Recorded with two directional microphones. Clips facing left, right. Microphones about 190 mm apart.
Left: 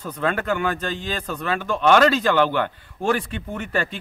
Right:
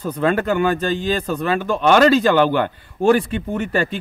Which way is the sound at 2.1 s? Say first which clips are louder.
Right 4 dB; 10° right (ahead or behind).